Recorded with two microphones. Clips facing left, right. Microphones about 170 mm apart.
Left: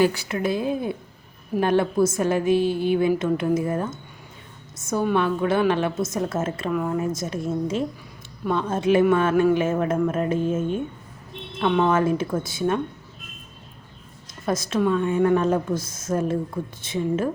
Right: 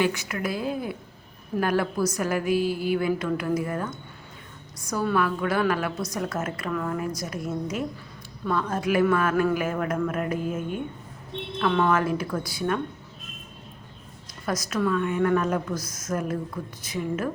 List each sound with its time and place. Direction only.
0.0 s a woman's voice: 35° left (ahead or behind)
14.4 s a woman's voice: 25° left (ahead or behind)